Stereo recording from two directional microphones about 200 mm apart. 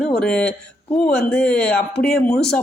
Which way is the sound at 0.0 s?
5° left (ahead or behind).